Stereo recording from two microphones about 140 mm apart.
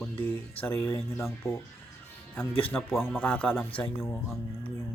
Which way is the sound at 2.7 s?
Centre (ahead or behind).